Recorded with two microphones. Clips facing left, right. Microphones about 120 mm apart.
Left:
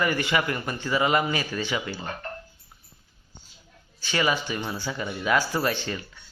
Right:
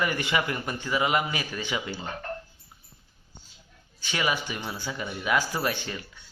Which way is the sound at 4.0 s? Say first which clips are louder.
Left 3 dB; 15° right (ahead or behind).